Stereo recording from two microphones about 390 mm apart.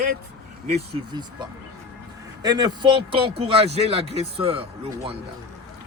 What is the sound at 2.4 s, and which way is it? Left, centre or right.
A man's voice, centre.